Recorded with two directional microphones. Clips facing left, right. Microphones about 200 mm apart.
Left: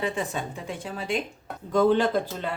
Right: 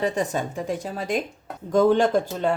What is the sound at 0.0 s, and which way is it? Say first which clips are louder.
A woman's voice: right 5 dB; 40° right (ahead or behind).